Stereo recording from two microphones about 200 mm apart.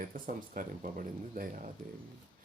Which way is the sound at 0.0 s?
45° right (ahead or behind).